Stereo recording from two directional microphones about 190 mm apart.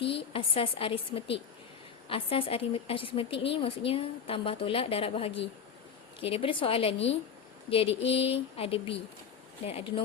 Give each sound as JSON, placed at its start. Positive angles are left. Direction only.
{"t": 0.0, "sound": "a woman's voice", "side_deg": 30}